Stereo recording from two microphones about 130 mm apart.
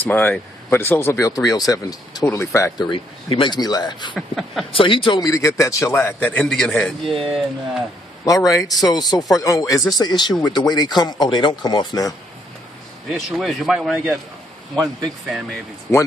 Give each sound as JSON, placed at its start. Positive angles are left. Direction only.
{"t": 0.0, "sound": "a man's voice", "side_deg": 15}
{"t": 2.9, "sound": "speech", "side_deg": 40}
{"t": 4.1, "sound": "a man's voice", "side_deg": 0}
{"t": 4.7, "sound": "speech", "side_deg": 40}
{"t": 5.2, "sound": "a man's voice", "side_deg": 25}
{"t": 6.0, "sound": "a man's voice", "side_deg": 10}
{"t": 8.3, "sound": "a man's voice", "side_deg": 25}
{"t": 13.1, "sound": "a man's voice", "side_deg": 0}